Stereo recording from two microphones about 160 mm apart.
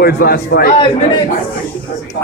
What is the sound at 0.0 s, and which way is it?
Speech, 75° left (ahead or behind).